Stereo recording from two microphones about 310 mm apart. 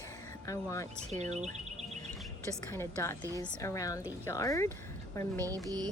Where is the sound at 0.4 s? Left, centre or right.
Centre.